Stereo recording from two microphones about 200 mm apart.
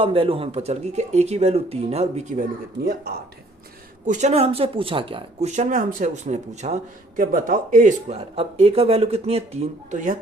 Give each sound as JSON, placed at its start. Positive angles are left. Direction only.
{"t": 0.0, "sound": "speech", "side_deg": -30}
{"t": 4.0, "sound": "speech", "side_deg": -35}